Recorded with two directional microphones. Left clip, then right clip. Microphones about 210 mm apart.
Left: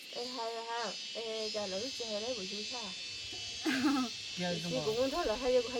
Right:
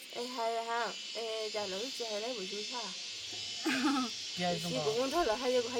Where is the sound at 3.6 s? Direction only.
5° left (ahead or behind).